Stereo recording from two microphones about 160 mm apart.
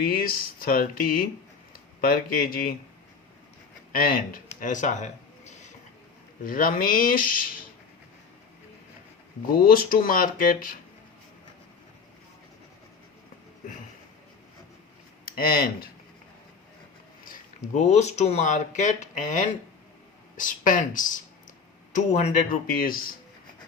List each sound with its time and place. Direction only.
0.0 s speech: 65° left (ahead or behind)
3.9 s speech: 65° left (ahead or behind); by 5.7 s 50° left (ahead or behind)
6.4 s speech: 65° left (ahead or behind)
9.6 s speech: 65° left (ahead or behind)
15.2 s speech: 65° left (ahead or behind)
17.2 s a sound: 60° left (ahead or behind)
17.8 s speech: 45° left (ahead or behind); by 23.0 s 65° left (ahead or behind)